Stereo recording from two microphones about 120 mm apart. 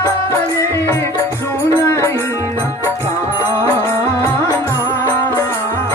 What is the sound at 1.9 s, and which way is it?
Music, 25° left (ahead or behind).